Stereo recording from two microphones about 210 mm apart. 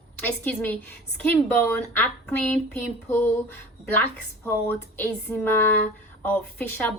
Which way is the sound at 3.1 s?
10° left (ahead or behind).